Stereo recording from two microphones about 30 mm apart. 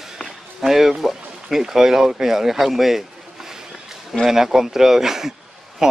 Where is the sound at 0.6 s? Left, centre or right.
Centre.